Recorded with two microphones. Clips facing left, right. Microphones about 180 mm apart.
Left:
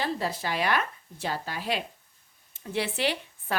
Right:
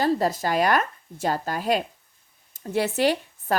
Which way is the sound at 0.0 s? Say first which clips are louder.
Right 7 dB; 45° right (ahead or behind).